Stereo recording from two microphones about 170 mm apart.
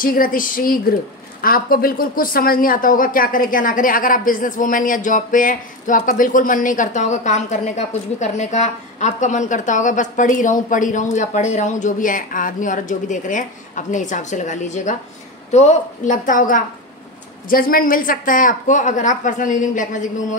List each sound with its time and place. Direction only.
0.0 s speech: 55° left (ahead or behind)